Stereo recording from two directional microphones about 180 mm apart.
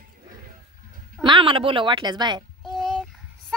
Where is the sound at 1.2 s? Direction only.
25° right (ahead or behind).